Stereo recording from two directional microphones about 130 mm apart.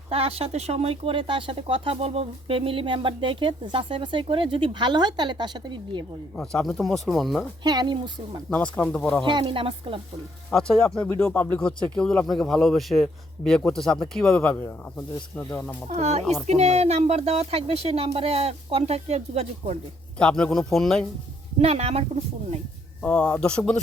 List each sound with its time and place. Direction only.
0.1 s speech: 50° right (ahead or behind)
6.3 s speech: 5° left (ahead or behind)
7.6 s speech: 30° right (ahead or behind)
8.4 s speech: 10° left (ahead or behind)
9.2 s speech: 40° right (ahead or behind)
10.5 s speech: 5° left (ahead or behind)
14.9 s speech: 20° left (ahead or behind)
15.9 s speech: 60° right (ahead or behind)
20.1 s speech: 10° left (ahead or behind)
21.6 s speech: 50° right (ahead or behind)
23.0 s speech: 10° left (ahead or behind)